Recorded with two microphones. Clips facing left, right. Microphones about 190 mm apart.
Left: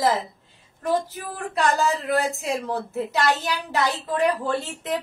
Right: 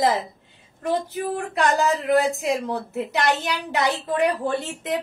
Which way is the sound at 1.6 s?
15° right (ahead or behind).